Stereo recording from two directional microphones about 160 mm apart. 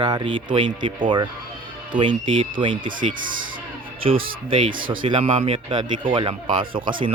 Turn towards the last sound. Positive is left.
turn(degrees=-30)  # may be behind; listen again after turning